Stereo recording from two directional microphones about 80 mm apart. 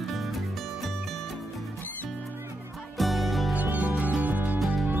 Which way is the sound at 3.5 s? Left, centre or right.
Centre.